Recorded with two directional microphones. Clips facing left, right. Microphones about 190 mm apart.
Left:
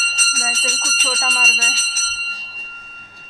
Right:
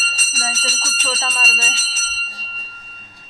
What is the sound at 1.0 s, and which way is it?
Speech, 5° left (ahead or behind).